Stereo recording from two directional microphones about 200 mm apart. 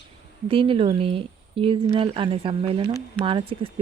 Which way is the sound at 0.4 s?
25° right (ahead or behind).